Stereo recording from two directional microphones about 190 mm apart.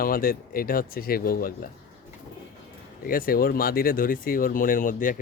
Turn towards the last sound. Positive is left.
turn(degrees=45)  # may be behind; listen again after turning